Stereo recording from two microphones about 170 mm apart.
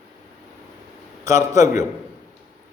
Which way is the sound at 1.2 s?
20° right (ahead or behind).